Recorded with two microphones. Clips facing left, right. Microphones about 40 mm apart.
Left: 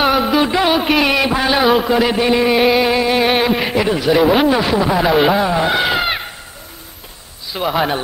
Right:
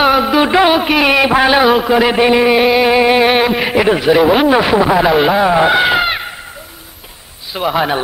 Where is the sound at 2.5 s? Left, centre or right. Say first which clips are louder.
Right 2 dB; centre.